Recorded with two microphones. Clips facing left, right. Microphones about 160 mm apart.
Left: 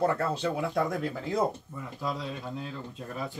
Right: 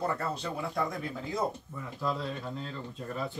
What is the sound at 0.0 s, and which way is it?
Speech, 90° left.